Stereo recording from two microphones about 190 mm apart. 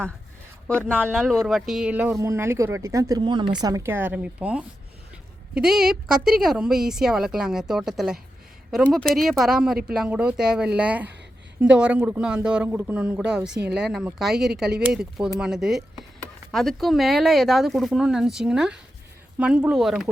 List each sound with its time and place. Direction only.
0.9 s speech: 5° left (ahead or behind)